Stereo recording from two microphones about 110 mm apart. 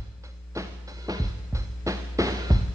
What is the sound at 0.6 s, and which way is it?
Music, 35° right (ahead or behind).